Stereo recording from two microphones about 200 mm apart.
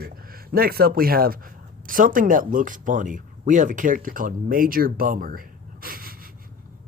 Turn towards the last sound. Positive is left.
turn(degrees=-45)  # may be behind; listen again after turning